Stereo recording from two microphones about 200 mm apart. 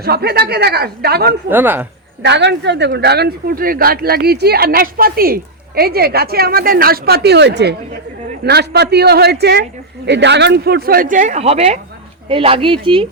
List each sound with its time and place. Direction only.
0.0 s speech: 50° right (ahead or behind)
1.5 s speech: 10° right (ahead or behind)
2.2 s a man's voice: 60° right (ahead or behind); by 13.1 s 25° right (ahead or behind)